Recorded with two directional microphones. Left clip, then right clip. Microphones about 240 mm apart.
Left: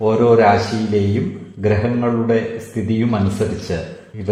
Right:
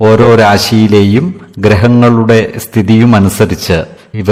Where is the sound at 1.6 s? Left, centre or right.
Right.